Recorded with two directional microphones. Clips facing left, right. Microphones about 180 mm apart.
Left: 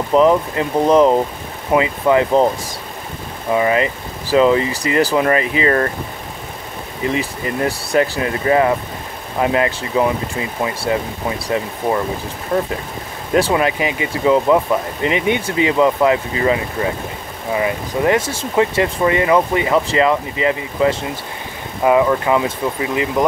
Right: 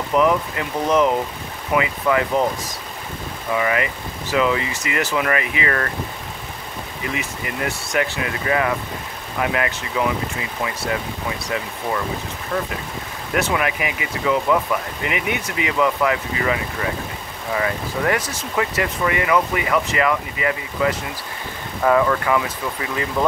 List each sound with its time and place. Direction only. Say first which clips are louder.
0.1 s speech: left 5 dB; 30° left (ahead or behind)
3.5 s speech: left 5 dB; 30° left (ahead or behind)
7.1 s speech: left 7 dB; 30° left (ahead or behind)